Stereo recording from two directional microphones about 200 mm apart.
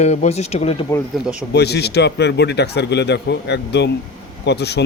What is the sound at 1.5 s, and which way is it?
Speech, 55° left (ahead or behind).